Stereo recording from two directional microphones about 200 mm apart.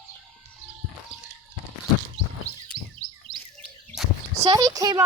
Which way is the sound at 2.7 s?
25° right (ahead or behind).